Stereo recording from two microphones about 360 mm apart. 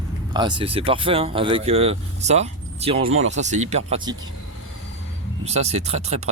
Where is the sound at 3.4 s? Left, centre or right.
Centre.